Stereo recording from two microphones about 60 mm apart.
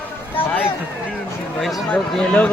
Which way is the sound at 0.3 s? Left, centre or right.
Left.